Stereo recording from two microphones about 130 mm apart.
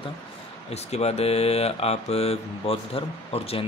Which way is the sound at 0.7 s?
55° left (ahead or behind).